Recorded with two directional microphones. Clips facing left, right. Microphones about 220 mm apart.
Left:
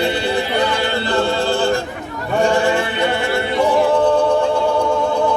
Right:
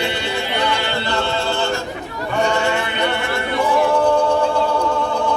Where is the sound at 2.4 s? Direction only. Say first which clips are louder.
Left 4 dB; 35° left (ahead or behind).